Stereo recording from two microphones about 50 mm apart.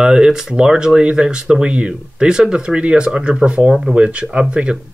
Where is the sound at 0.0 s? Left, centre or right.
Centre.